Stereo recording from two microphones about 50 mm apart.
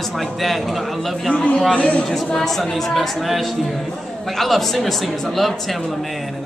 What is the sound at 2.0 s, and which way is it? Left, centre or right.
A woman's voice, centre.